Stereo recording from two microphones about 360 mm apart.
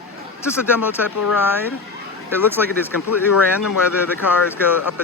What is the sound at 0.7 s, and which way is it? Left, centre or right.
Speech, centre.